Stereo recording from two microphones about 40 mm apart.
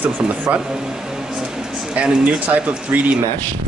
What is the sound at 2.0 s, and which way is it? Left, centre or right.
Speech, right.